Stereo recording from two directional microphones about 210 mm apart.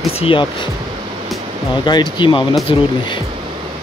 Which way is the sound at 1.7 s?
20° left (ahead or behind).